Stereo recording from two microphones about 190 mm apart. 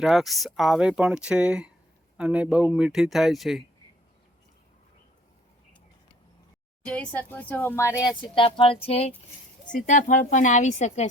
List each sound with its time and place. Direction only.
0.0 s speech: centre (ahead or behind)
6.8 s a woman's voice: 5° left (ahead or behind); by 11.1 s 40° left (ahead or behind)